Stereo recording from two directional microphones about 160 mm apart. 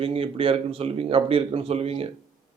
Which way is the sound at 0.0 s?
35° right (ahead or behind).